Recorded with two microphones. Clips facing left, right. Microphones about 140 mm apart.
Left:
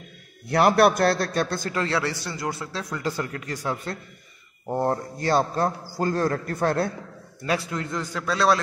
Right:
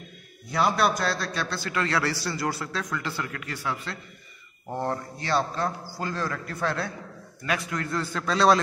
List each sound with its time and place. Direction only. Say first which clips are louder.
0.5 s a man's voice: left 6 dB; 65° left (ahead or behind); by 1.8 s 45° left (ahead or behind)
1.8 s a man's voice: even; 25° left (ahead or behind)
2.9 s a man's voice: left 3 dB; 40° left (ahead or behind)
7.4 s a man's voice: left 3 dB; 30° left (ahead or behind); by 8.5 s 5° left (ahead or behind)